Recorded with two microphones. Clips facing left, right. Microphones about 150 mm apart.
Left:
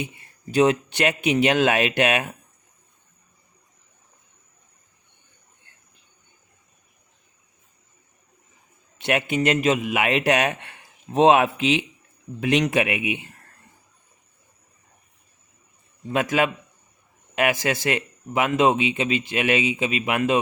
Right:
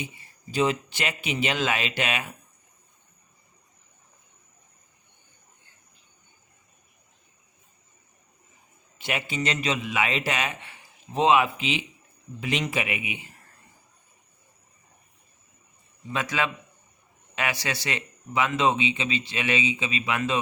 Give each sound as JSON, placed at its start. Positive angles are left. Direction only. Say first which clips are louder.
{"t": 0.0, "sound": "a man's voice", "louder": "left 5 dB", "side_deg": 60}
{"t": 9.0, "sound": "a man's voice", "louder": "left 7 dB", "side_deg": 65}
{"t": 16.1, "sound": "speech", "louder": "left 6 dB", "side_deg": 50}